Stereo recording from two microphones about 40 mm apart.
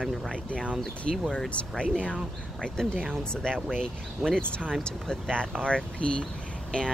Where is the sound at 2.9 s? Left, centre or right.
Centre.